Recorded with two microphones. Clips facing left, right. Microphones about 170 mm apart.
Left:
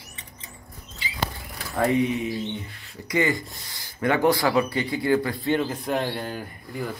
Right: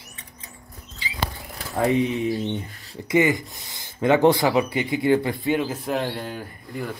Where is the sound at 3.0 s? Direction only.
20° right (ahead or behind).